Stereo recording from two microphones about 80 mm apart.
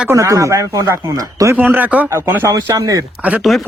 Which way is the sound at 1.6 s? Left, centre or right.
Right.